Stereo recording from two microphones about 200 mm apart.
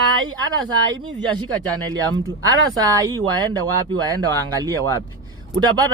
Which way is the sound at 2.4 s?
20° right (ahead or behind).